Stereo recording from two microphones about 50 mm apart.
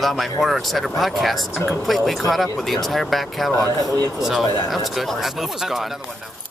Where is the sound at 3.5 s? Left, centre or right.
Left.